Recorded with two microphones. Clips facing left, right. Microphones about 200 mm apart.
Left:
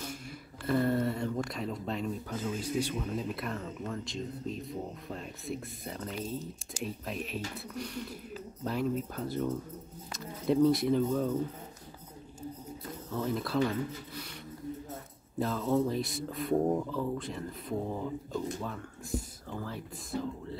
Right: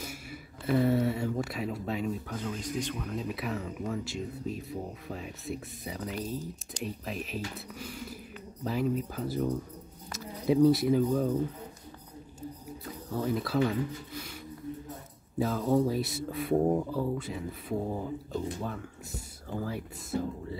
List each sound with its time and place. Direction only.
0.0 s a sound: 5° right (ahead or behind)
1.4 s speech: 5° right (ahead or behind)
6.2 s speech: 25° left (ahead or behind)
6.7 s speech: centre (ahead or behind)
13.1 s speech: 5° right (ahead or behind)
15.3 s speech: 5° right (ahead or behind)